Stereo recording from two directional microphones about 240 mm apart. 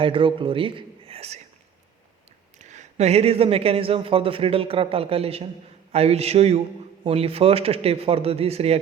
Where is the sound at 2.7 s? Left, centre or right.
Right.